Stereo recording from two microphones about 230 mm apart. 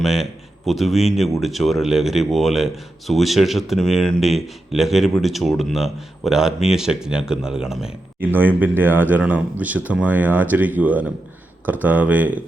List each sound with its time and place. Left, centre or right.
0.0 s speech: centre